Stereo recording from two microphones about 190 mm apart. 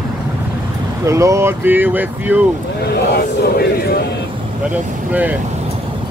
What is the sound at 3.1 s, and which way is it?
Chant, 55° left (ahead or behind).